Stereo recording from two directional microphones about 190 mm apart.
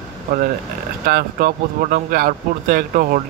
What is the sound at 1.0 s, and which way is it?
Speech, 45° right (ahead or behind).